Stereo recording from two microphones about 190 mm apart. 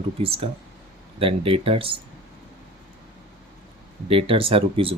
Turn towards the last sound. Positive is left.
turn(degrees=-30)  # may be behind; listen again after turning